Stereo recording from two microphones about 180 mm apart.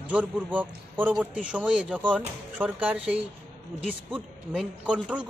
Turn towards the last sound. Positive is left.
turn(degrees=-5)  # may be behind; listen again after turning